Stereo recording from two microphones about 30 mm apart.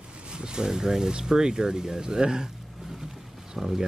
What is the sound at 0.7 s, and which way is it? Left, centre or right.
Speech, centre.